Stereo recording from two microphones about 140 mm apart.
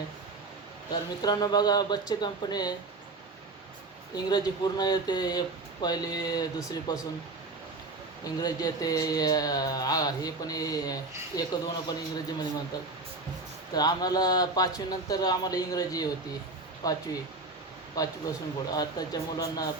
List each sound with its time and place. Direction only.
1.2 s speech: 30° left (ahead or behind)
4.1 s speech: 30° left (ahead or behind)
8.2 s speech: 25° left (ahead or behind)